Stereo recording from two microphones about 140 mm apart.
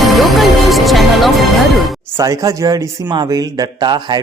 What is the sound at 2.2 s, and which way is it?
Speech, 25° right (ahead or behind).